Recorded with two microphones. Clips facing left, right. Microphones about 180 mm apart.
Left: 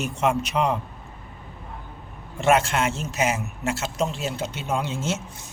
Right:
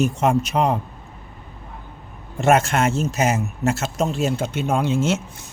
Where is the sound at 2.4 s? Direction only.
45° right (ahead or behind).